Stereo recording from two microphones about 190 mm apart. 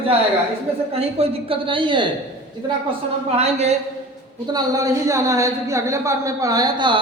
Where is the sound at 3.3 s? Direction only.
35° right (ahead or behind).